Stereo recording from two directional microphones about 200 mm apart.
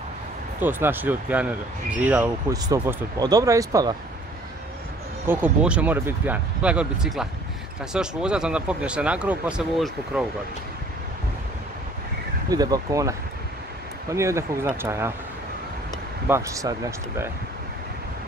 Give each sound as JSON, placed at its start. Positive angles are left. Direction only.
{"t": 0.6, "sound": "speech", "side_deg": -10}
{"t": 5.2, "sound": "speech", "side_deg": -10}
{"t": 12.4, "sound": "speech", "side_deg": -20}
{"t": 14.1, "sound": "speech", "side_deg": -15}
{"t": 16.3, "sound": "speech", "side_deg": -15}